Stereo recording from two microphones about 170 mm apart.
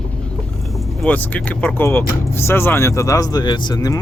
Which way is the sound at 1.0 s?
10° left (ahead or behind).